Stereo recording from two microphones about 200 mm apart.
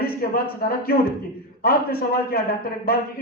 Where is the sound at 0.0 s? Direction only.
45° left (ahead or behind).